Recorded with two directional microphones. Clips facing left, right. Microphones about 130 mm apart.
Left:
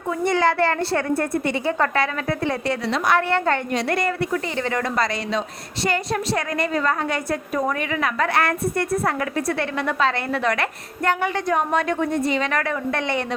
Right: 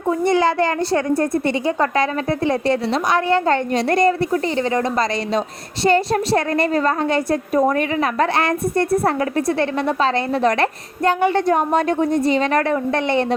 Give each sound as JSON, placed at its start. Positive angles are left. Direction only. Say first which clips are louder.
{"t": 0.3, "sound": "a woman's voice", "louder": "right 2 dB", "side_deg": -15}
{"t": 3.8, "sound": "a woman's voice", "louder": "right 6 dB", "side_deg": -35}
{"t": 4.5, "sound": "a woman's voice", "louder": "right 4 dB", "side_deg": -25}
{"t": 8.4, "sound": "a woman's voice", "louder": "right 3 dB", "side_deg": -25}